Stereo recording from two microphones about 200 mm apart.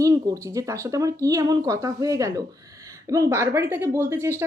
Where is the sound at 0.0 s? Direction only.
15° right (ahead or behind).